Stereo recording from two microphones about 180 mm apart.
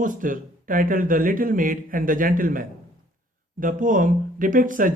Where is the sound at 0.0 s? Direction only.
50° right (ahead or behind).